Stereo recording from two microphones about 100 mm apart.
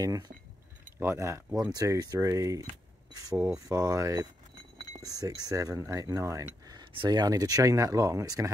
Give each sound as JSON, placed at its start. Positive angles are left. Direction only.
{"t": 0.0, "sound": "speech", "side_deg": -40}
{"t": 1.0, "sound": "speech", "side_deg": -30}
{"t": 1.7, "sound": "speech", "side_deg": -40}
{"t": 6.8, "sound": "speech", "side_deg": -55}